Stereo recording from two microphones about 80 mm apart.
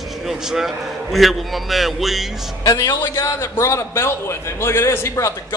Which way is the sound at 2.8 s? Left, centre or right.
Left.